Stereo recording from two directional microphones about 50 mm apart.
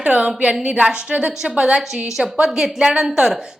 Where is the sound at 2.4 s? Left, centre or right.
Centre.